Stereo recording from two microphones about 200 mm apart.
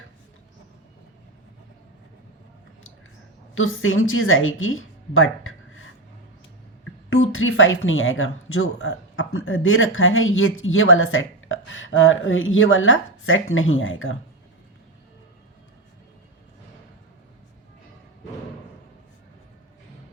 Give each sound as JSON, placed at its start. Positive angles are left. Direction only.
{"t": 3.5, "sound": "speech", "side_deg": 85}
{"t": 7.1, "sound": "speech", "side_deg": 85}